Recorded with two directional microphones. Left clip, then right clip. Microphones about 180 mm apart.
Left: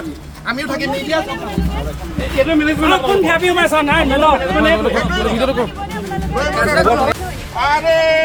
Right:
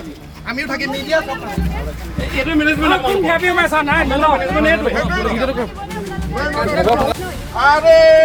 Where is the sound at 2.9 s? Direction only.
40° left (ahead or behind).